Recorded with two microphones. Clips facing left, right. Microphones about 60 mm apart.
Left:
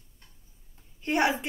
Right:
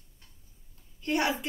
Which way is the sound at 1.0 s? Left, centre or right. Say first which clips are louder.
Left 3 dB; left.